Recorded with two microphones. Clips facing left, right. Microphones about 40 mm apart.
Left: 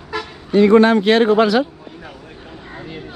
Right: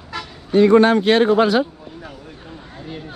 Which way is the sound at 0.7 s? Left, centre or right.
Left.